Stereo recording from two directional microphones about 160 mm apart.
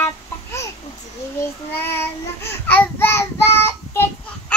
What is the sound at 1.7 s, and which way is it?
Child singing, 15° left (ahead or behind).